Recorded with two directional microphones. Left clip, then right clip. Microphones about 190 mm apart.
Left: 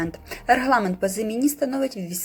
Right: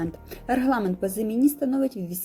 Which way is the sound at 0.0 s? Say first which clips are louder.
Left 4 dB; 40° right (ahead or behind).